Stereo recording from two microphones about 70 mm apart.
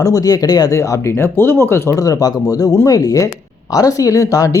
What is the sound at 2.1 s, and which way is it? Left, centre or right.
Speech, left.